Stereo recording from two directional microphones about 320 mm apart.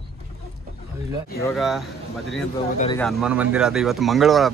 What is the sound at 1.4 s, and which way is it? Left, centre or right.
Speech, centre.